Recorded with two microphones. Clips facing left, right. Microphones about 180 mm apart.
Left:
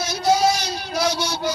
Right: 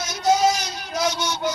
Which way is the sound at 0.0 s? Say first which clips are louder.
Left 1 dB; 30° left (ahead or behind).